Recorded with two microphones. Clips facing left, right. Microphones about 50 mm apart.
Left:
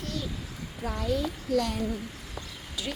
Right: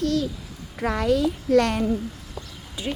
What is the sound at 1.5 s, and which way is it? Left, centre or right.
Speech, right.